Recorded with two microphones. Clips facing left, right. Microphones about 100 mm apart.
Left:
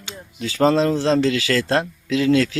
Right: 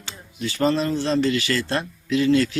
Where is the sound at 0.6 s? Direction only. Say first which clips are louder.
Left 5 dB; 90° left.